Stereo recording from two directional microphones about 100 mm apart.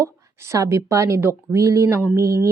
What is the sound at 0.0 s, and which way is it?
A woman's voice, 30° right (ahead or behind).